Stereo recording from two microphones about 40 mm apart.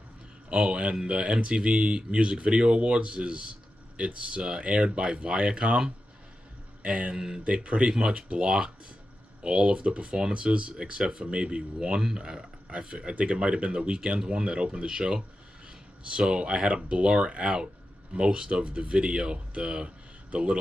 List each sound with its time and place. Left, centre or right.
0.5 s speech: right
7.4 s speech: right